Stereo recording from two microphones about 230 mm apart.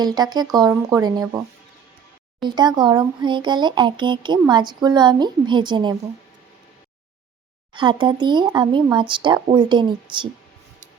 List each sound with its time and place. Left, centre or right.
0.0 s speech: centre
2.4 s speech: centre
7.7 s speech: right